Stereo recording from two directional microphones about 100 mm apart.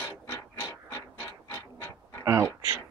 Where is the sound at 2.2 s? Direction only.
30° right (ahead or behind).